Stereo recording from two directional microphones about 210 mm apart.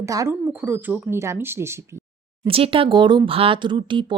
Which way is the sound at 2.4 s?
25° right (ahead or behind).